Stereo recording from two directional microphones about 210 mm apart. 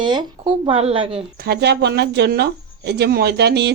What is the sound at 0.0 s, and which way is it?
Speech, 20° right (ahead or behind).